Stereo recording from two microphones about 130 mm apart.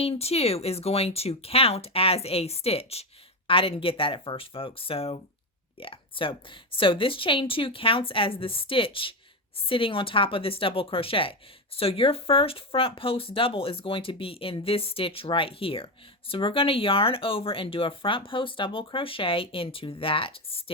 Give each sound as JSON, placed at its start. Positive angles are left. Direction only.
{"t": 0.0, "sound": "speech", "side_deg": 50}